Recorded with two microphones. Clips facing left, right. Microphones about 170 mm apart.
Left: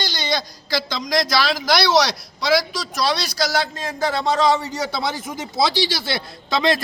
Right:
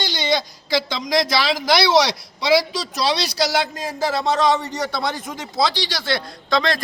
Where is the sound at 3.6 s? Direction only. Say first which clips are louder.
Even; 10° right (ahead or behind).